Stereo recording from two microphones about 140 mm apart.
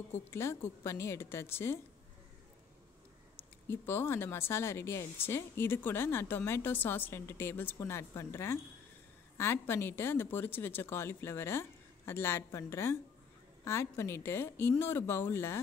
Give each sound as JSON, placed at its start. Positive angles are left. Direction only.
{"t": 0.3, "sound": "speech", "side_deg": 15}
{"t": 3.3, "sound": "speech", "side_deg": 15}